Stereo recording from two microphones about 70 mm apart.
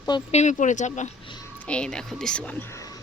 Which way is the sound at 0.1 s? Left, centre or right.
Left.